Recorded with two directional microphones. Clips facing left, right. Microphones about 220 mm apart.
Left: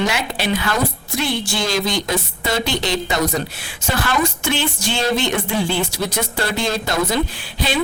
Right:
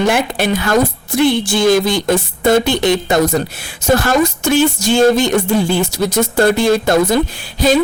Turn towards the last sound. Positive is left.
turn(degrees=-40)  # may be behind; listen again after turning